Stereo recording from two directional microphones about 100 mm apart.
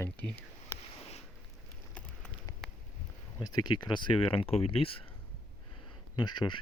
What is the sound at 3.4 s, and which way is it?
Speech, 45° left (ahead or behind).